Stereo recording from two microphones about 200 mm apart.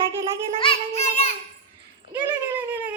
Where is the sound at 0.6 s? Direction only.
25° left (ahead or behind).